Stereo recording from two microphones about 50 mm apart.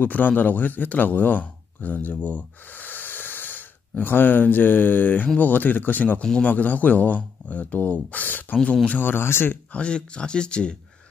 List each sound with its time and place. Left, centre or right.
0.0 s a man's voice: left
9.0 s speech: left
9.7 s speech: left